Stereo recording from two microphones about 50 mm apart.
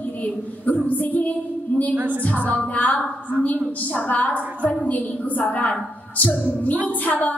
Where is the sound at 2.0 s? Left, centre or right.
Right.